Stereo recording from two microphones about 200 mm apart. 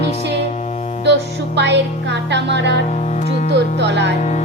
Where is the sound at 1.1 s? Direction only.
60° right (ahead or behind).